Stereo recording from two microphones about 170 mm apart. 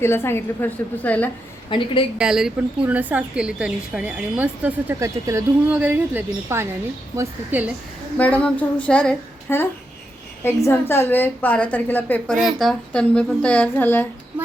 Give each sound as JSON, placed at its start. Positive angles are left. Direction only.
{"t": 0.0, "sound": "a woman's voice", "side_deg": 15}
{"t": 1.7, "sound": "a woman's voice", "side_deg": 30}
{"t": 2.1, "sound": "a woman's voice", "side_deg": -5}
{"t": 8.2, "sound": "a woman's voice", "side_deg": 10}
{"t": 12.4, "sound": "a woman's voice", "side_deg": 0}